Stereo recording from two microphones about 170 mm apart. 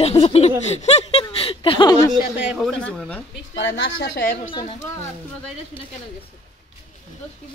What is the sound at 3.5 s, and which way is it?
Speech, 90° left.